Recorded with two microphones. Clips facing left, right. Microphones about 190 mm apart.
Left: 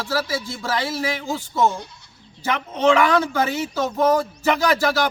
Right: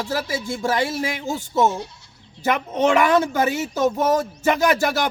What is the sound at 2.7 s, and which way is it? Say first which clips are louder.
Speech: left 1 dB; 20° right (ahead or behind).